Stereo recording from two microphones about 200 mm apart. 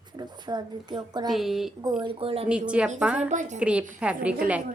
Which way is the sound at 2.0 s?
25° right (ahead or behind).